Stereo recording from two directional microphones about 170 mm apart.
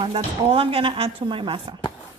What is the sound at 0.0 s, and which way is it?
Speech, 30° right (ahead or behind).